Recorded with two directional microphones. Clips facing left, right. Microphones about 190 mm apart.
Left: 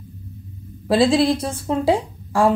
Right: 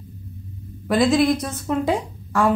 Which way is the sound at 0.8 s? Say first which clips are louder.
Left 1 dB; 30° left (ahead or behind).